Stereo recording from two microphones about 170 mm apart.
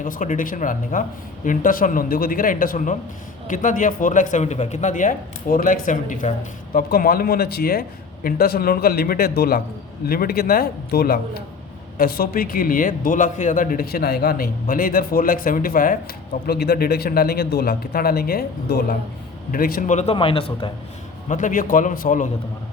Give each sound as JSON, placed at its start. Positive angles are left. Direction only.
{"t": 0.0, "sound": "speech", "side_deg": 50}
{"t": 16.5, "sound": "speech", "side_deg": 65}
{"t": 20.0, "sound": "a man's voice", "side_deg": 35}
{"t": 21.2, "sound": "speech", "side_deg": 50}